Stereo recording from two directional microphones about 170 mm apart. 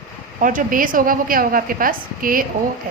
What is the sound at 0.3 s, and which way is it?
A woman's voice, 50° right (ahead or behind).